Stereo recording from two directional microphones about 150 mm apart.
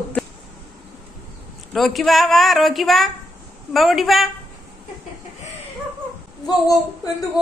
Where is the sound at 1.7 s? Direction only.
Centre (ahead or behind).